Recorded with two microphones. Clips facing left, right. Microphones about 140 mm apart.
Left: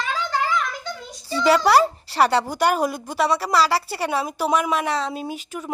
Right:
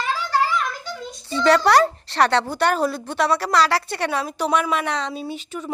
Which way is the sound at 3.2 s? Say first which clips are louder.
Even; centre (ahead or behind).